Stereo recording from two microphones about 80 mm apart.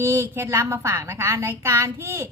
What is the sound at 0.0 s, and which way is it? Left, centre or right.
A woman's voice, right.